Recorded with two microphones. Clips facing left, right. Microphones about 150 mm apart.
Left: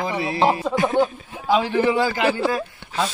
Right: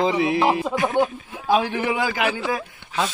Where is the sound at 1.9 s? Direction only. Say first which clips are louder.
Left 3 dB; 15° right (ahead or behind).